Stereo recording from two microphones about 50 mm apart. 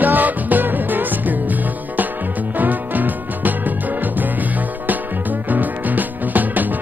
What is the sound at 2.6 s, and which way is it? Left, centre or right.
Music, right.